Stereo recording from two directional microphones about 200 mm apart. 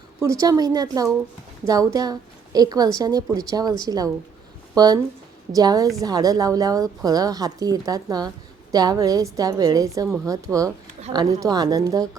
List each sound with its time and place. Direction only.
0.2 s a woman's voice: 15° right (ahead or behind)